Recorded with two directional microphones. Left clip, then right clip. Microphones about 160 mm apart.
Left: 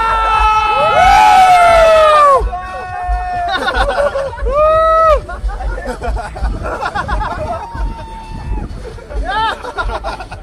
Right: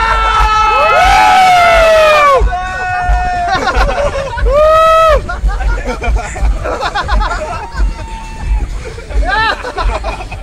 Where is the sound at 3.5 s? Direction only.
50° right (ahead or behind).